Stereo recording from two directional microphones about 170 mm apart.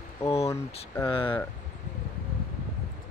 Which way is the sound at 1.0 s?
30° left (ahead or behind).